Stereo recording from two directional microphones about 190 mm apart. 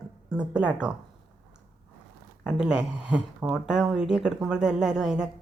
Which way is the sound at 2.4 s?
5° right (ahead or behind).